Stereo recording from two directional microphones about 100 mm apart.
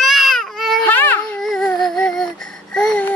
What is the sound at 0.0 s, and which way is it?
Baby cry, centre (ahead or behind).